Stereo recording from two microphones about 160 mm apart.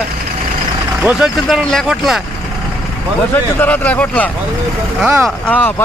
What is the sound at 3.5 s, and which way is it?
Speech, 10° left (ahead or behind).